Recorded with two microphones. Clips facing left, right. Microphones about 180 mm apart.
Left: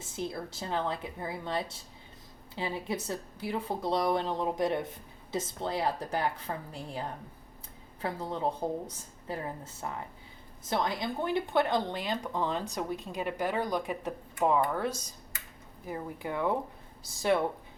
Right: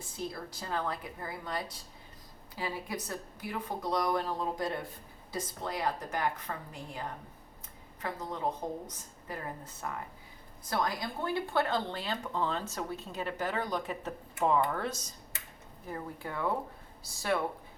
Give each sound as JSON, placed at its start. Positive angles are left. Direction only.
{"t": 0.2, "sound": "speech", "side_deg": 25}